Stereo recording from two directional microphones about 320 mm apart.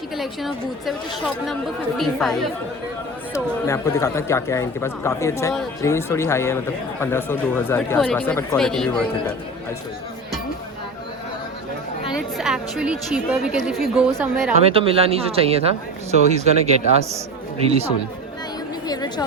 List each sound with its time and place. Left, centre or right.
0.2 s speech: centre
12.1 s speech: centre
14.6 s speech: centre
18.9 s a sound: centre